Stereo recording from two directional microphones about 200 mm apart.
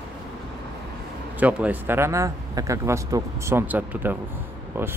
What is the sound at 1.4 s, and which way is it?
Speech, 10° right (ahead or behind).